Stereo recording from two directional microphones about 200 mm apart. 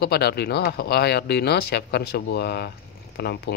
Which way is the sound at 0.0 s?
55° left (ahead or behind).